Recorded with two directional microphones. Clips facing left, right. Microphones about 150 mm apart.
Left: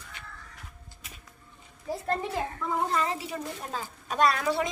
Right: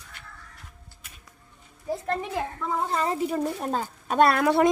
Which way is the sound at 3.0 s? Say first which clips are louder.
Right 6 dB; 45° right (ahead or behind).